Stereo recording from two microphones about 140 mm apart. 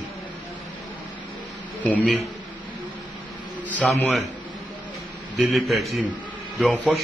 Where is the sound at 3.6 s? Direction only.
10° left (ahead or behind).